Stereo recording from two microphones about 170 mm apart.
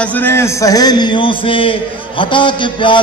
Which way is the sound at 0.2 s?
15° left (ahead or behind).